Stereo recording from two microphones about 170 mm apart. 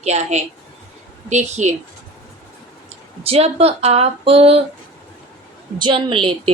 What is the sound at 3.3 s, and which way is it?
A woman's voice, 35° right (ahead or behind).